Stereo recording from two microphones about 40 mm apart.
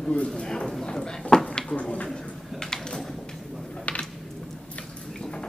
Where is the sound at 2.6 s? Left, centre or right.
Centre.